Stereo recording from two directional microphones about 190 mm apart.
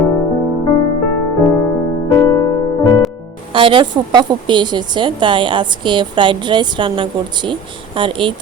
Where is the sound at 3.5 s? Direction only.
25° right (ahead or behind).